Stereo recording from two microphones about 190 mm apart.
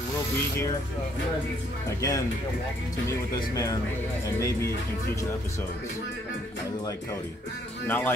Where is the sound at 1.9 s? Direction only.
15° left (ahead or behind).